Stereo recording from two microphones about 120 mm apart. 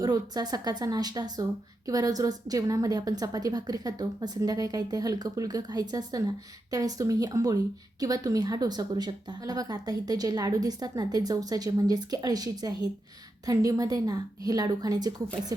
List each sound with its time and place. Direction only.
0.0 s a woman's voice: 35° right (ahead or behind)